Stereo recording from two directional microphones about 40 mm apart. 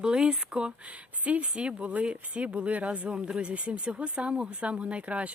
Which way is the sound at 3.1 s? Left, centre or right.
Right.